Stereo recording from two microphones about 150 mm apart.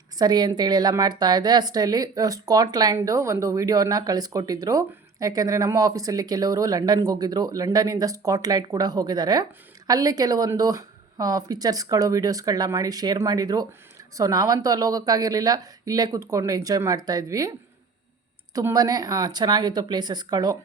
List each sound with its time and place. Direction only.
0.2 s a woman's voice: 30° right (ahead or behind)
18.5 s a woman's voice: 25° right (ahead or behind)